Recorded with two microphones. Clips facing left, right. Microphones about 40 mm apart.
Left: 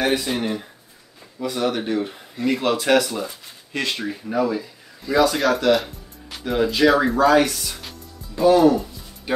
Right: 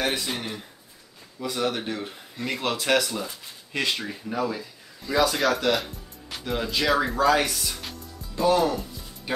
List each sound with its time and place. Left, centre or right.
0.0 s speech: centre